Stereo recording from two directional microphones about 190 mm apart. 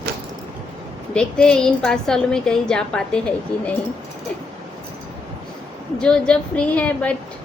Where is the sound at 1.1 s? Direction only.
5° left (ahead or behind).